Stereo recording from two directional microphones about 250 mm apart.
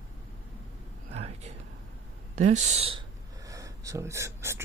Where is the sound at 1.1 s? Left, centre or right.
Right.